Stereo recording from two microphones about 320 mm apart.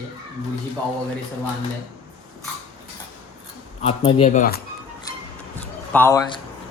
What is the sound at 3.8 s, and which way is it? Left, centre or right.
Speech, centre.